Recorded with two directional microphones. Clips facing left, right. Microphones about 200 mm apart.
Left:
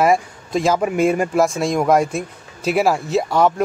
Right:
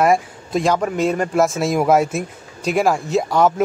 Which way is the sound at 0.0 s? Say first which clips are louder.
Even; centre (ahead or behind).